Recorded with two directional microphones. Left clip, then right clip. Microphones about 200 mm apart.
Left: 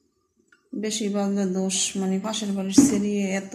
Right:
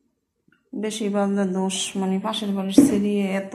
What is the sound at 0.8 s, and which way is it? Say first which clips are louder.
A woman's voice: right 3 dB; 20° left (ahead or behind).